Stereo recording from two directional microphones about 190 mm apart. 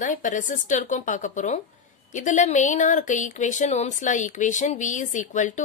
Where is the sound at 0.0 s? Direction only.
40° left (ahead or behind).